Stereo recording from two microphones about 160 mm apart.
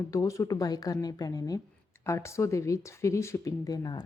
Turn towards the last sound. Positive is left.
turn(degrees=25)  # may be behind; listen again after turning